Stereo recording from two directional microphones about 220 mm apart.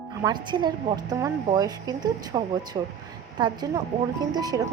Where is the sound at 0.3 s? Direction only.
20° right (ahead or behind).